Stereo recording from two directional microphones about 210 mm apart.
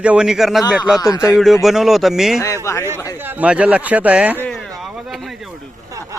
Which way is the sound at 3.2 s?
10° right (ahead or behind).